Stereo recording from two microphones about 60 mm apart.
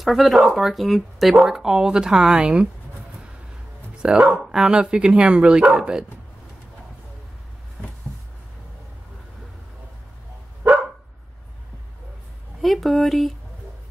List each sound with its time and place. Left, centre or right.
0.0 s speech: centre
4.0 s speech: centre
12.6 s speech: centre